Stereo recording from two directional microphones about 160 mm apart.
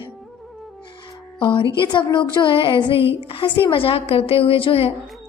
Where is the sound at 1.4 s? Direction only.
30° left (ahead or behind).